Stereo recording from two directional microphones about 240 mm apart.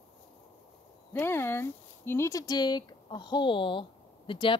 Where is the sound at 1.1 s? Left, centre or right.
Centre.